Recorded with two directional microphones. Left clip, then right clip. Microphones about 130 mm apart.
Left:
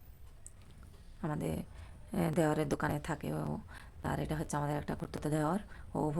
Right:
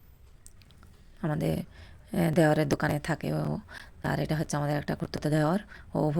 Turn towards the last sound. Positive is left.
turn(degrees=-40)  # may be behind; listen again after turning